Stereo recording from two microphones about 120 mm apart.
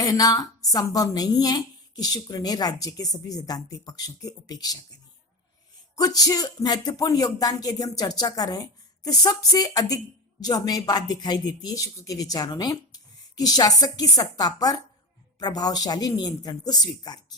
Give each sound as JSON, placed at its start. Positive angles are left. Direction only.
{"t": 0.0, "sound": "a woman's voice", "side_deg": 30}
{"t": 6.0, "sound": "a woman's voice", "side_deg": 30}